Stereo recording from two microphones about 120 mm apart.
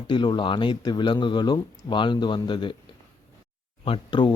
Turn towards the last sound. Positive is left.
turn(degrees=40)  # may be behind; listen again after turning